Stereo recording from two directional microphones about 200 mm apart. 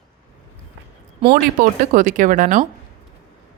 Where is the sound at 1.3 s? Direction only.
40° right (ahead or behind).